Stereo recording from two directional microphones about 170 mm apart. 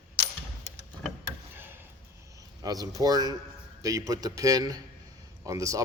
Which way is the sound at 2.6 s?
20° right (ahead or behind).